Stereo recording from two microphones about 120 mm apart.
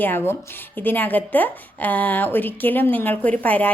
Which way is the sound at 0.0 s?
15° left (ahead or behind).